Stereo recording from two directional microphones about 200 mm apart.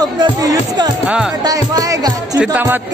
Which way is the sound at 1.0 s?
5° right (ahead or behind).